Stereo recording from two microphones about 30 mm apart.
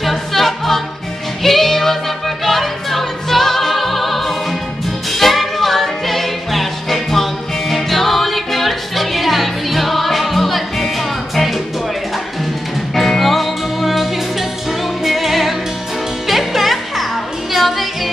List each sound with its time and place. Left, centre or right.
0.0 s music: centre
12.9 s music: centre